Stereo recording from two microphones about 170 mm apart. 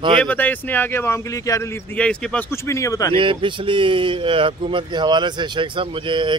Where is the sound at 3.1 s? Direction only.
30° right (ahead or behind).